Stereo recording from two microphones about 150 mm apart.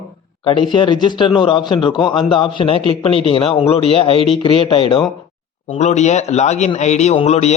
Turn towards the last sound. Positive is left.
turn(degrees=45)  # may be behind; listen again after turning